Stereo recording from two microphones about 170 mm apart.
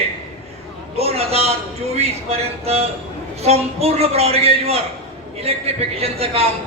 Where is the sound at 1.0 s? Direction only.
35° right (ahead or behind).